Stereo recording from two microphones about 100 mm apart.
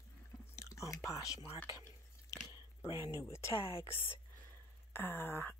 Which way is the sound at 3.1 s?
30° left (ahead or behind).